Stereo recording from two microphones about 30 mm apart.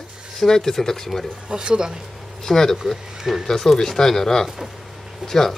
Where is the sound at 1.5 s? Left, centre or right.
Right.